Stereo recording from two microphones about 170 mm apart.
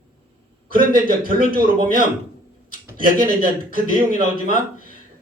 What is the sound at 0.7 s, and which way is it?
Speech, 55° right (ahead or behind).